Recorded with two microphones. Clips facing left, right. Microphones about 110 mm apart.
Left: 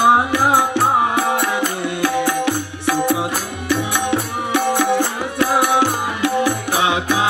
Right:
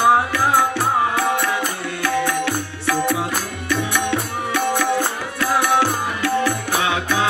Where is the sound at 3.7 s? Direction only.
20° left (ahead or behind).